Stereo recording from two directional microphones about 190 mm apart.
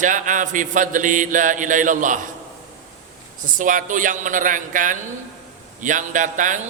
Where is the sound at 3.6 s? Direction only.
45° right (ahead or behind).